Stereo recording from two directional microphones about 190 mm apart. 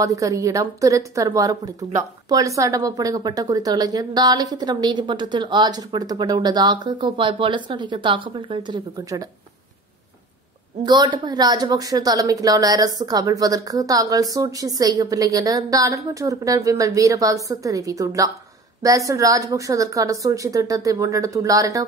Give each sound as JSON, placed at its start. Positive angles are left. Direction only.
{"t": 0.0, "sound": "a woman's voice", "side_deg": -15}
{"t": 10.8, "sound": "a woman's voice", "side_deg": -20}